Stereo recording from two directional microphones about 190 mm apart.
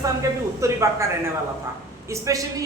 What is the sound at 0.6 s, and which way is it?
Speech, 15° right (ahead or behind).